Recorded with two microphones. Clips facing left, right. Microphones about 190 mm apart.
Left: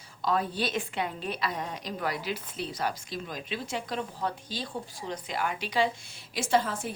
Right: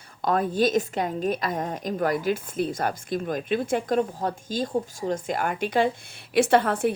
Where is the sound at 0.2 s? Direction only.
50° right (ahead or behind).